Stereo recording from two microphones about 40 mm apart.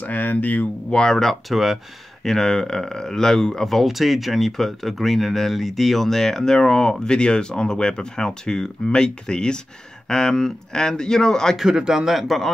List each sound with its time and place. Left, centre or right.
0.0 s speech: left
0.8 s speech: centre
2.2 s speech: centre
11.7 s a man's voice: centre
12.1 s speech: centre